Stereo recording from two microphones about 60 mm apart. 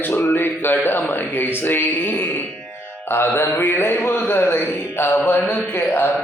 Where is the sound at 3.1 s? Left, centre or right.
Left.